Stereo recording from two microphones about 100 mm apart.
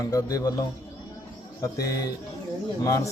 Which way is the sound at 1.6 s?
35° left (ahead or behind).